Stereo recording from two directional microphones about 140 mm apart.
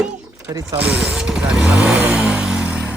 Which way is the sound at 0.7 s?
10° right (ahead or behind).